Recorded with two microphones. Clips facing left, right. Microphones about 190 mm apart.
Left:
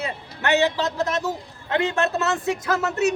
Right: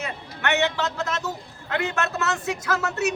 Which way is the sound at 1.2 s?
25° left (ahead or behind).